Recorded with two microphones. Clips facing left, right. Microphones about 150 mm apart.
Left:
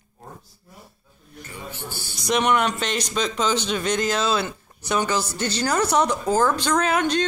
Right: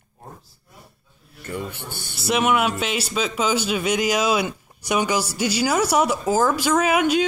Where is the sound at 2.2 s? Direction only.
5° right (ahead or behind).